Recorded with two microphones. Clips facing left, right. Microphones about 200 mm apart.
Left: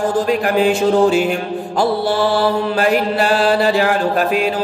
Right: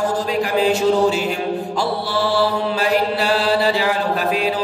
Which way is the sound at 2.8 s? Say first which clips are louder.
Left 3 dB; 50° left (ahead or behind).